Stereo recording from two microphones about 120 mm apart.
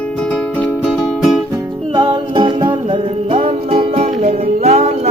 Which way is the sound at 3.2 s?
55° right (ahead or behind).